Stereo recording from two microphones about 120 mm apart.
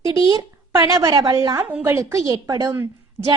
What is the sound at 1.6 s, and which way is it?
A woman's voice, 20° right (ahead or behind).